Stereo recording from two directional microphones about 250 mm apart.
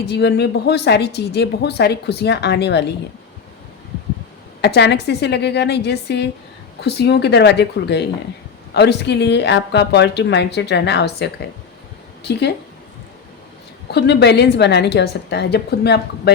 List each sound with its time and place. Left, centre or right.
0.1 s a woman's voice: left
4.6 s a woman's voice: left
13.9 s speech: left